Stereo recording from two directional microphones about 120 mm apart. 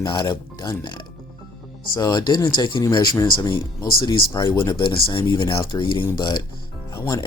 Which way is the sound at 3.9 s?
45° left (ahead or behind).